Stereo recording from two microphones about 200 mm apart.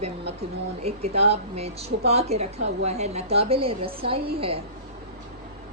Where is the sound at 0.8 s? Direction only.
30° right (ahead or behind).